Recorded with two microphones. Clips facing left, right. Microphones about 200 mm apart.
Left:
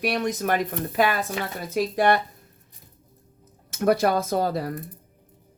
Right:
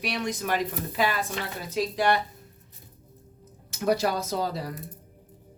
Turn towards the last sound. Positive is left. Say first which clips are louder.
# left 5 dB
turn(degrees=55)  # may be behind; listen again after turning